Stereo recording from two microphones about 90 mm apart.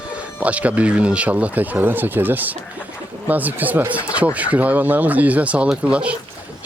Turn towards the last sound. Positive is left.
turn(degrees=-15)  # may be behind; listen again after turning